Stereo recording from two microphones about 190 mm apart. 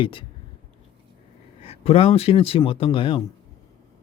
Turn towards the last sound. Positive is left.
turn(degrees=25)  # may be behind; listen again after turning